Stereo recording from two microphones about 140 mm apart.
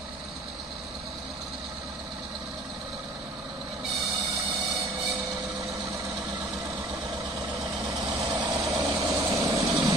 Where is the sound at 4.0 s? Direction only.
25° right (ahead or behind).